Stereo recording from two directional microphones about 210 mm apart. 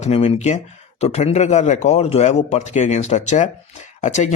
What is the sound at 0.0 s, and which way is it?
Speech, 30° left (ahead or behind).